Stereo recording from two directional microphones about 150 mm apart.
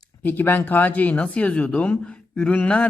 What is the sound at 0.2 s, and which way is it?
Speech, 10° left (ahead or behind).